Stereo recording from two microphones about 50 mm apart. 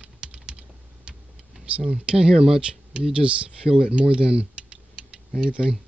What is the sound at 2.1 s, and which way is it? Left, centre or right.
Speech, centre.